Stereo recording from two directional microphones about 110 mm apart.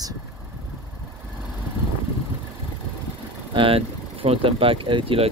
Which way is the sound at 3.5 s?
55° right (ahead or behind).